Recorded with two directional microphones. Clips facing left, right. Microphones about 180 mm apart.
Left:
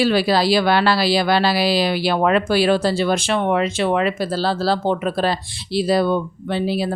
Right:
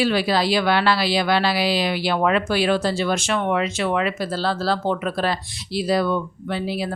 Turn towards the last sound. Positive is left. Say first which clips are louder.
# left 4 dB
turn(degrees=30)  # may be behind; listen again after turning